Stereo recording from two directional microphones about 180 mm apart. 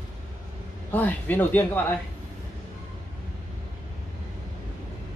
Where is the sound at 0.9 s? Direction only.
10° left (ahead or behind).